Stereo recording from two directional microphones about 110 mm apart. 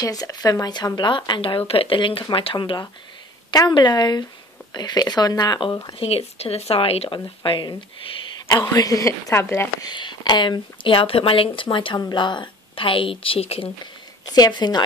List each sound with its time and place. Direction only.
0.0 s speech: 35° left (ahead or behind)
5.9 s speech: 65° left (ahead or behind)
7.1 s speech: 50° left (ahead or behind)
8.7 s speech: 30° left (ahead or behind)
9.8 s speech: 40° left (ahead or behind); by 13.7 s 60° left (ahead or behind)
14.3 s speech: 40° left (ahead or behind)